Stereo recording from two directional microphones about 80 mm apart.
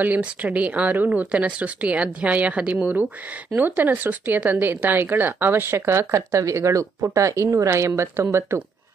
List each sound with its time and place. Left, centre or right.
0.0 s a woman's voice: right